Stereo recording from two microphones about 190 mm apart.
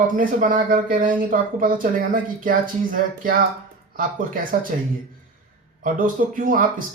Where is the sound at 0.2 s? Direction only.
45° right (ahead or behind).